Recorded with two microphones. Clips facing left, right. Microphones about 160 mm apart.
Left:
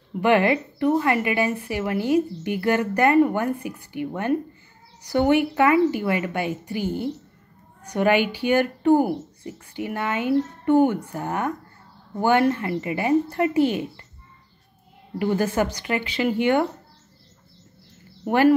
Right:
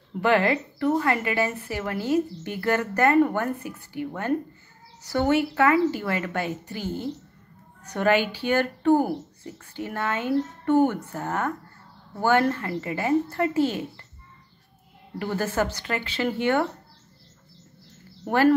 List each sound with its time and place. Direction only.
0.2 s a woman's voice: 15° left (ahead or behind)
15.1 s a woman's voice: 15° left (ahead or behind)
18.2 s speech: 15° left (ahead or behind)